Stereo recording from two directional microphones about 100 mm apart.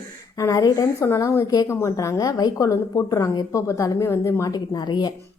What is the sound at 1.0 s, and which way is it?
A woman's voice, 25° left (ahead or behind).